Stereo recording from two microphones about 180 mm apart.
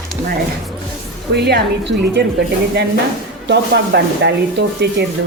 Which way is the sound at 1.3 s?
70° right (ahead or behind).